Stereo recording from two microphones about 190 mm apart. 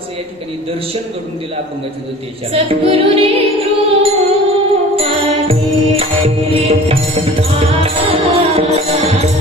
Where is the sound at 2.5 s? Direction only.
30° right (ahead or behind).